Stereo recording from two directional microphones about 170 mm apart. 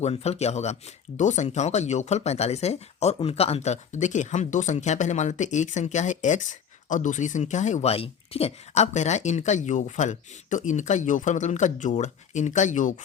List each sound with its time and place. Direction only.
0.0 s speech: 40° left (ahead or behind)